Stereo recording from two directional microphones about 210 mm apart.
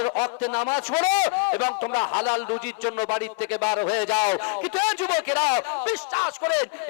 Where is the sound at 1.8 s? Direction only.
20° left (ahead or behind).